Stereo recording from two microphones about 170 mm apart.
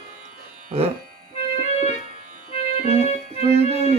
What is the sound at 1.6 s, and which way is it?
Keyboard, 40° left (ahead or behind).